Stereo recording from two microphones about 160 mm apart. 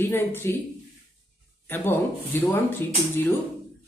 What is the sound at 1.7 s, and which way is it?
Speech, 15° left (ahead or behind).